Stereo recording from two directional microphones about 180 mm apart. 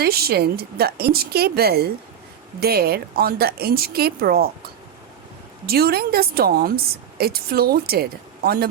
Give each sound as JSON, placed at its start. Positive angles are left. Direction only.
{"t": 0.0, "sound": "a woman's voice", "side_deg": -60}